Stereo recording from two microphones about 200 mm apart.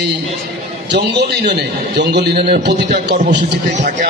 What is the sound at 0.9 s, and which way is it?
A man's voice, 60° right (ahead or behind).